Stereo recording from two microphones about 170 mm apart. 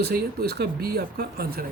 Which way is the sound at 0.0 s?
70° right (ahead or behind).